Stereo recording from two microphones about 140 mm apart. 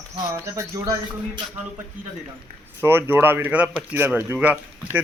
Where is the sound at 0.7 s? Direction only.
25° right (ahead or behind).